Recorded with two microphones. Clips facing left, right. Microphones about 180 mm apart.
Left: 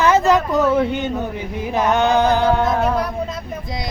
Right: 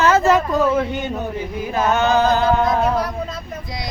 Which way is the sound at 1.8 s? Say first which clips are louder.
Left 1 dB; 15° left (ahead or behind).